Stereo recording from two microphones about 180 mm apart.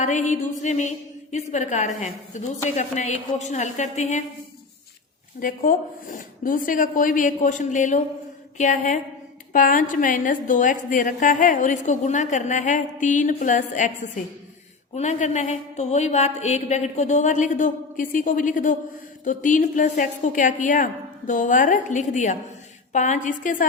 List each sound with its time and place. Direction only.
0.0 s a woman's voice: 40° left (ahead or behind)
5.4 s a woman's voice: 50° left (ahead or behind)
14.9 s a woman's voice: 40° left (ahead or behind)